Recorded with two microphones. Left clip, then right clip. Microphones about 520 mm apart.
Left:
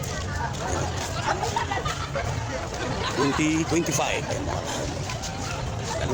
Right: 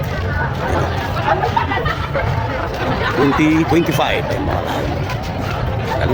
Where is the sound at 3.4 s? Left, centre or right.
Left.